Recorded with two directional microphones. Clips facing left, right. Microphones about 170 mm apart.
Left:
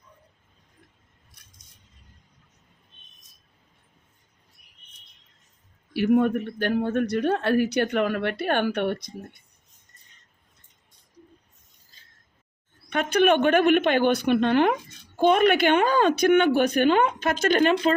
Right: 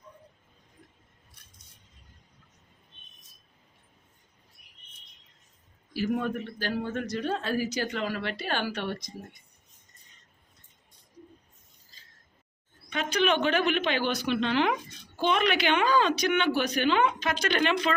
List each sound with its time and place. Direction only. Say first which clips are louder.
5.9 s speech: left 8 dB; 60° left (ahead or behind)
12.9 s speech: left 6 dB; 55° left (ahead or behind)